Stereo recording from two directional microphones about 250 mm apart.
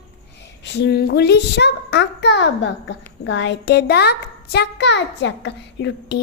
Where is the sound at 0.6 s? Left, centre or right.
Left.